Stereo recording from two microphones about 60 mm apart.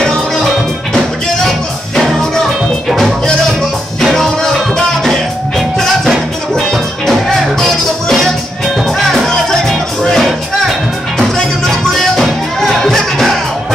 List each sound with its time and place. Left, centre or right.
0.9 s music: centre
11.3 s music: centre